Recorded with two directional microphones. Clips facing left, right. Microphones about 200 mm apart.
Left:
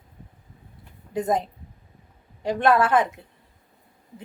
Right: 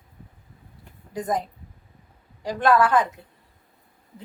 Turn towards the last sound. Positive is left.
turn(degrees=25)  # may be behind; listen again after turning